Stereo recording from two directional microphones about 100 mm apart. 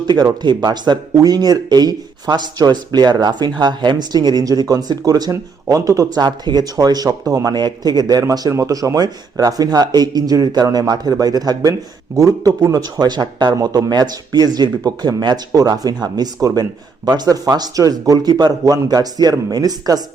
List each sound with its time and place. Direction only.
0.1 s speech: 45° right (ahead or behind)